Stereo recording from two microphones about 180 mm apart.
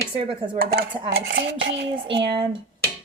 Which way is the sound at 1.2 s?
70° right (ahead or behind).